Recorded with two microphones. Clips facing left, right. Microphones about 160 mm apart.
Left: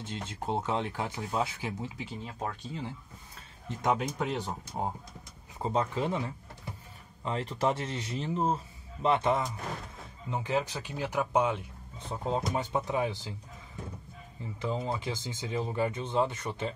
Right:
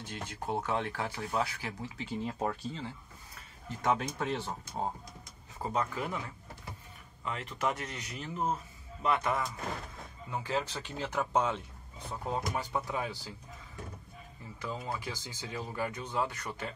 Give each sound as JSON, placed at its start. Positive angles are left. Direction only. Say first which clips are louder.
{"t": 0.0, "sound": "speech", "louder": "left 3 dB", "side_deg": 25}
{"t": 2.2, "sound": "speech", "louder": "right 4 dB", "side_deg": -10}
{"t": 3.6, "sound": "speech", "louder": "left 2 dB", "side_deg": 15}
{"t": 5.6, "sound": "speech", "louder": "left 4 dB", "side_deg": 25}
{"t": 12.1, "sound": "speech", "louder": "left 4 dB", "side_deg": 25}
{"t": 14.6, "sound": "speech", "louder": "left 5 dB", "side_deg": 25}